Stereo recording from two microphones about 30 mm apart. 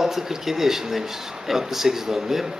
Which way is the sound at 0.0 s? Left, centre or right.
Centre.